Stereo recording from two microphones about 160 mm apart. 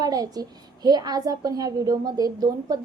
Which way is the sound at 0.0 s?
25° right (ahead or behind).